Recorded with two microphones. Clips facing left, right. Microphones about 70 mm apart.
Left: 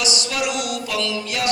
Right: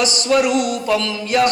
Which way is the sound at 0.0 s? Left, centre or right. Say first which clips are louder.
Right 7 dB; right.